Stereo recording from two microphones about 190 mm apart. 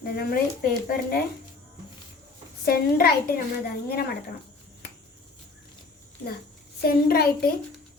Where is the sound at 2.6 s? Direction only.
55° left (ahead or behind).